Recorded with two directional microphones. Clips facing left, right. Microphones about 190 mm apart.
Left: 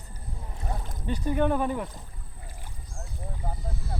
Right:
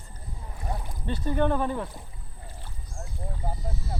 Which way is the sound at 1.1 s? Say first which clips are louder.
Even; 15° left (ahead or behind).